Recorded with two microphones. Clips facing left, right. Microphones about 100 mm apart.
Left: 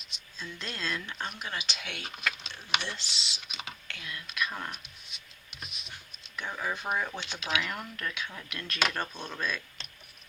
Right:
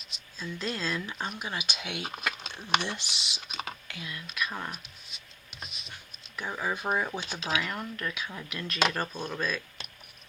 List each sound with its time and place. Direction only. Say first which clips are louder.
0.0 s speech: right 3 dB; centre (ahead or behind)
3.4 s computer keyboard: right 5 dB; 45° right (ahead or behind)
3.8 s whispering: right 1 dB; 5° right (ahead or behind)
6.3 s speech: right 2 dB; 10° right (ahead or behind)
7.3 s speech: right 1 dB; 30° right (ahead or behind)
7.6 s speech: right 2 dB; centre (ahead or behind)